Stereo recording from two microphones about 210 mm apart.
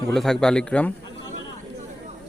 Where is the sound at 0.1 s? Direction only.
Centre (ahead or behind).